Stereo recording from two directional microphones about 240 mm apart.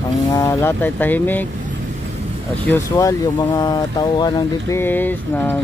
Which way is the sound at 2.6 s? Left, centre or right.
Centre.